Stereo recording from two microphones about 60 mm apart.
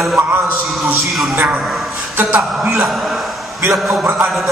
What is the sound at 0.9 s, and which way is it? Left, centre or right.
Speech, centre.